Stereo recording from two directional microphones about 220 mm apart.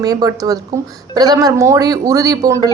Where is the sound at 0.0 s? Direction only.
15° right (ahead or behind).